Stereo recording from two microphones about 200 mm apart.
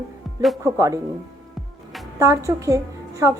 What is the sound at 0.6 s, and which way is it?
Speech, 15° right (ahead or behind).